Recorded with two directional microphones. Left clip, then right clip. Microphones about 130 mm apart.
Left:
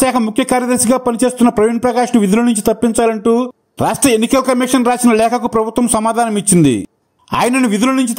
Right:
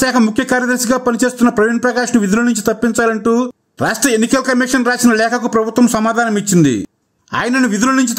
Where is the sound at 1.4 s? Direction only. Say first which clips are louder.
Left 1 dB; 10° left (ahead or behind).